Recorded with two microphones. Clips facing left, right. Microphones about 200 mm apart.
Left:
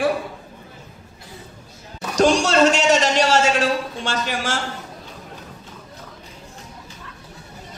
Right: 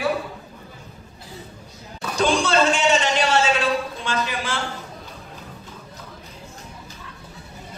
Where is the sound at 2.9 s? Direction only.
45° left (ahead or behind).